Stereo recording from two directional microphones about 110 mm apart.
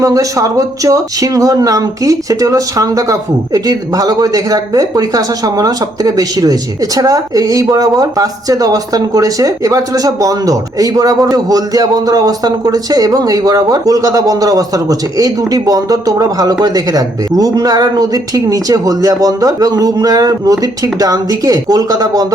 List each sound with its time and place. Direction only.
0.0 s speech: 30° right (ahead or behind)